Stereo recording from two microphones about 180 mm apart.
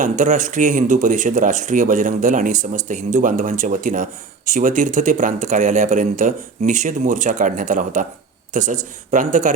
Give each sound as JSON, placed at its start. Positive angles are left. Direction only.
{"t": 0.0, "sound": "speech", "side_deg": -45}